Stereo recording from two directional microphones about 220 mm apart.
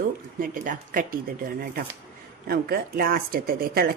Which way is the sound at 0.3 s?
40° right (ahead or behind).